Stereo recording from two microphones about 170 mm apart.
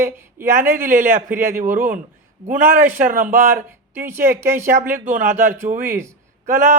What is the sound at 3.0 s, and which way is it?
Speech, 50° right (ahead or behind).